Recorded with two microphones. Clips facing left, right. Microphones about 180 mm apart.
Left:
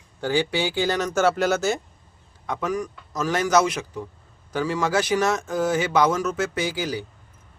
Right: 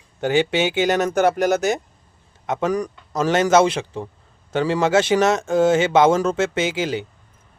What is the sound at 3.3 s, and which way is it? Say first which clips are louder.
Speech: right 5 dB; 25° right (ahead or behind).